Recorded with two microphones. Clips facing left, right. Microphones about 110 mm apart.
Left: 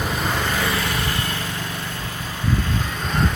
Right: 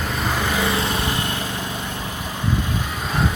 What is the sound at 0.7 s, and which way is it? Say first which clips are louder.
Vehicle: right 2 dB; 25° right (ahead or behind).